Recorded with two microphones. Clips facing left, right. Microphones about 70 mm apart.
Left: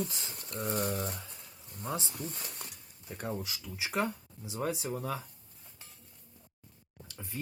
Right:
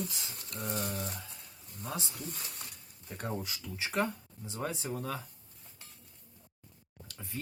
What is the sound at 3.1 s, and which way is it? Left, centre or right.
Speech, centre.